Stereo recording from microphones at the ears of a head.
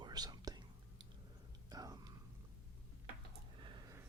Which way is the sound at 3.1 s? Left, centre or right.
Right.